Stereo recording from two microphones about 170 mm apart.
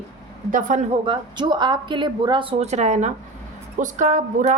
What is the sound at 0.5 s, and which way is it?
Speech, 50° right (ahead or behind).